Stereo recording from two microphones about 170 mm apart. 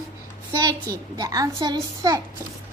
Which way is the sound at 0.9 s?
20° right (ahead or behind).